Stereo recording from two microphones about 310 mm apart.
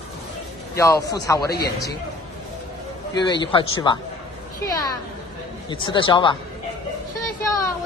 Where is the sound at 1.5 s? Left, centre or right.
Left.